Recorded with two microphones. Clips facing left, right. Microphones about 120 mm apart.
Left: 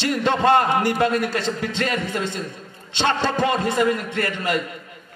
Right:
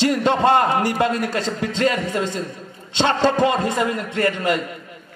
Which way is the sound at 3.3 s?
25° right (ahead or behind).